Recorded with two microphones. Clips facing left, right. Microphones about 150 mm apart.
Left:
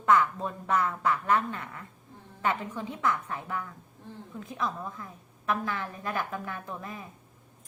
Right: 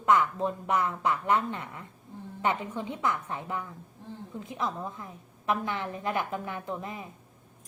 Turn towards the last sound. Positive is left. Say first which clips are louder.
# right 3 dB
turn(degrees=-20)  # may be behind; listen again after turning